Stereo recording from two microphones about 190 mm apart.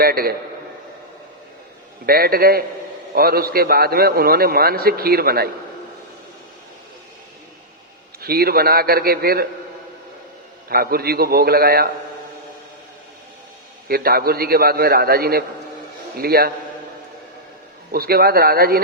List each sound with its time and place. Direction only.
0.0 s a man's voice: 50° right (ahead or behind)
2.0 s a man's voice: 55° right (ahead or behind)
8.2 s a man's voice: 55° right (ahead or behind)
10.7 s a man's voice: 50° right (ahead or behind)
13.8 s a man's voice: 55° right (ahead or behind)
17.9 s a man's voice: 55° right (ahead or behind)